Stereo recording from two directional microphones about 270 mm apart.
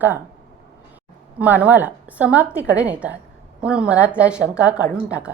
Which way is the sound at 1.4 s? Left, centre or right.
Centre.